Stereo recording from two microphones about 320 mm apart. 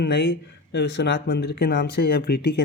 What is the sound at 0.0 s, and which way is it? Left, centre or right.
Speech, left.